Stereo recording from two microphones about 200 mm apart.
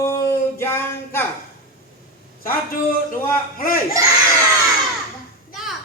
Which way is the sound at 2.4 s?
45° left (ahead or behind).